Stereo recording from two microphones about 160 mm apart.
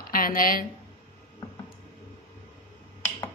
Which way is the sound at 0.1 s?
60° left (ahead or behind).